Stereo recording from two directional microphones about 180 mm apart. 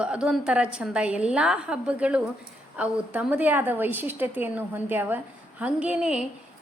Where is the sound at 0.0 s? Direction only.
5° right (ahead or behind).